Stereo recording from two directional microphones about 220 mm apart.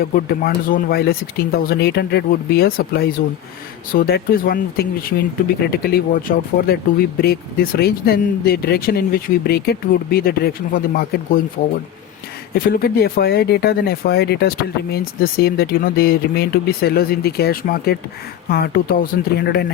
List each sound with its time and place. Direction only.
0.0 s speech: 45° left (ahead or behind)
12.5 s speech: 45° left (ahead or behind)